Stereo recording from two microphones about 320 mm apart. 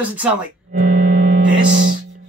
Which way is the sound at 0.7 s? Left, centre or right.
Right.